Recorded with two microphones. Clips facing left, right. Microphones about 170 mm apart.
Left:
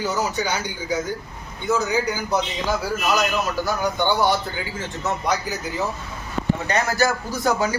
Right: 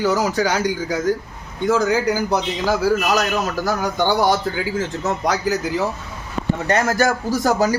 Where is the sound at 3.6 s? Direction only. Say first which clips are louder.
Right 2 dB; 90° right.